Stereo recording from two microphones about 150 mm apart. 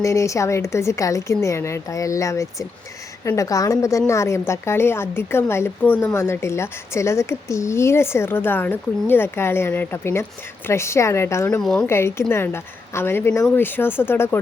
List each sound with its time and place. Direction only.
0.0 s a woman's voice: 20° left (ahead or behind)
11.6 s speech: 5° left (ahead or behind)
11.9 s a woman's voice: 15° left (ahead or behind)